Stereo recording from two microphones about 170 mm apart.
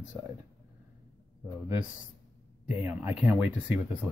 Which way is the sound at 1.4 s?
15° right (ahead or behind).